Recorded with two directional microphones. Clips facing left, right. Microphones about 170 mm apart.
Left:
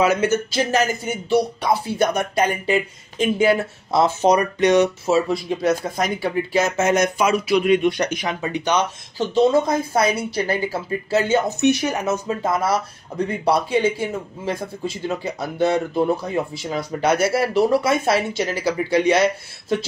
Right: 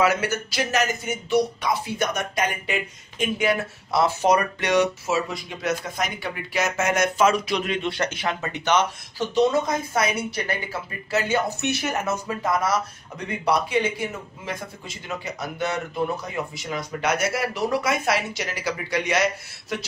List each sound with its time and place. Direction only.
0.0 s speech: 20° left (ahead or behind)
9.3 s speech: 30° left (ahead or behind)
13.1 s speech: 35° left (ahead or behind)